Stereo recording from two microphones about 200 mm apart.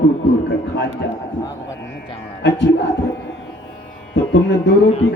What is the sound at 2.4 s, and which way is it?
Speech, 60° left (ahead or behind).